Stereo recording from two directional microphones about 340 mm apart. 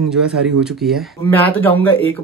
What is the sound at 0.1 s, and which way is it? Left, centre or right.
Speech, centre.